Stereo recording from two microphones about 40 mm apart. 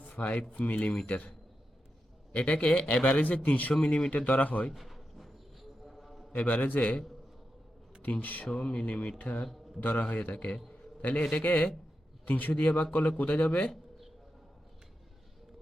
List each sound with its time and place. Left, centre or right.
0.1 s speech: left
3.8 s a man's voice: left
4.1 s speech: left
4.7 s a sound: centre
6.3 s a man's voice: left
8.0 s a man's voice: left
8.6 s speech: left
10.3 s a man's voice: left
12.2 s a man's voice: left
13.3 s speech: left